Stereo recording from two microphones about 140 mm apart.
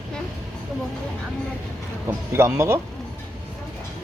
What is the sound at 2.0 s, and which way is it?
Speech, 20° right (ahead or behind).